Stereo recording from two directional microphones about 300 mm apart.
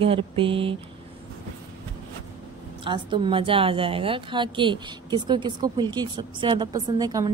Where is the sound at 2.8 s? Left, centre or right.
Centre.